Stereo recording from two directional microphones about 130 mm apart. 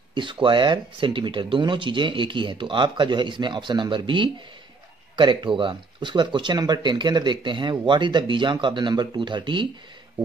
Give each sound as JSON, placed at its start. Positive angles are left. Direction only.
{"t": 0.1, "sound": "speech", "side_deg": -40}